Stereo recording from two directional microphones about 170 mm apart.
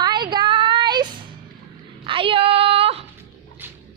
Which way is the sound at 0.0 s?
25° right (ahead or behind).